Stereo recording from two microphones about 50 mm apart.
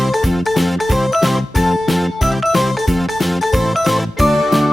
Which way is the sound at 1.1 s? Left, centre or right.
Centre.